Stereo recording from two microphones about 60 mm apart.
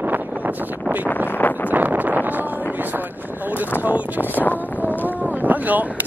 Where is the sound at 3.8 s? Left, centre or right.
Right.